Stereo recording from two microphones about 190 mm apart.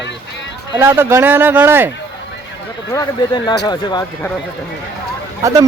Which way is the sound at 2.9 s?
20° left (ahead or behind).